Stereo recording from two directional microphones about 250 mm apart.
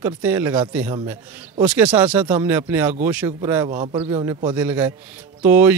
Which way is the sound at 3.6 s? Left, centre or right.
Right.